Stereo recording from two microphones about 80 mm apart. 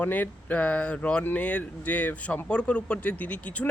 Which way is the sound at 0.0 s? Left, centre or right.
Left.